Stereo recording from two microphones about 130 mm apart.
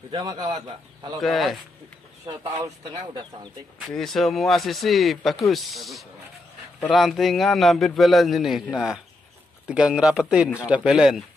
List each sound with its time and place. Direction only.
0.1 s a man's voice: 35° right (ahead or behind)
1.2 s a man's voice: centre (ahead or behind)
2.5 s speech: 25° right (ahead or behind)
3.9 s a man's voice: centre (ahead or behind)